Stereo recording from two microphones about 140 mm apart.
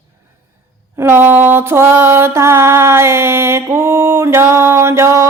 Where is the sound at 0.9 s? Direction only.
15° right (ahead or behind).